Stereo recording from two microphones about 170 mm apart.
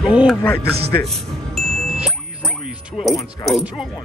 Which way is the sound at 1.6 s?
Centre (ahead or behind).